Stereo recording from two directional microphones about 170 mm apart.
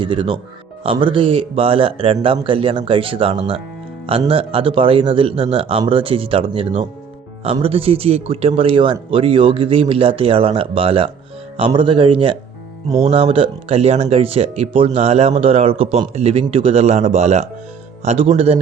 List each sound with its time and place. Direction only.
0.0 s speech: 30° right (ahead or behind)